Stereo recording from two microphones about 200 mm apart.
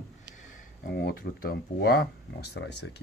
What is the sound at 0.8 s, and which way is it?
Speech, 50° left (ahead or behind).